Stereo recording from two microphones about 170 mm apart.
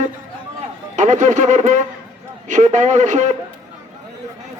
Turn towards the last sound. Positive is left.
turn(degrees=-45)  # may be behind; listen again after turning